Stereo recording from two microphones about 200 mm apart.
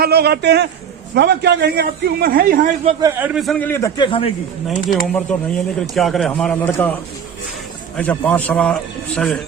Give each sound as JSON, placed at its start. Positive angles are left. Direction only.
{"t": 0.0, "sound": "a man's voice", "side_deg": -55}
{"t": 3.0, "sound": "a man's voice", "side_deg": -10}
{"t": 4.9, "sound": "a man's voice", "side_deg": 5}
{"t": 7.9, "sound": "a man's voice", "side_deg": 10}